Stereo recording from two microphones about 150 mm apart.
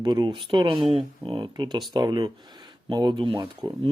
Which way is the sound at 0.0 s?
30° right (ahead or behind).